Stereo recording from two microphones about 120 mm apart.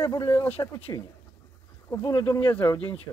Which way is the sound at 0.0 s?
30° left (ahead or behind).